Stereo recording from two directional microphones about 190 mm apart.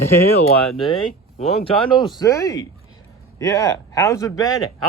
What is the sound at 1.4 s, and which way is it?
A man's voice, 30° left (ahead or behind).